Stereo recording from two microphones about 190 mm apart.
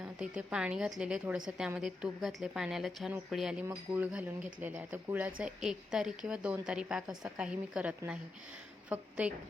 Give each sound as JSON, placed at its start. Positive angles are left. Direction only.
{"t": 0.0, "sound": "a woman's voice", "side_deg": -5}